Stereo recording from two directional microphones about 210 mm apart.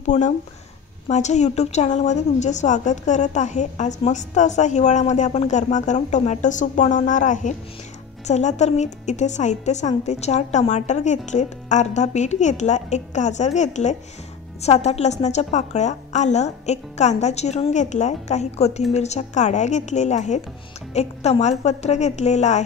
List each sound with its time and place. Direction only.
0.0 s a woman's voice: 35° left (ahead or behind)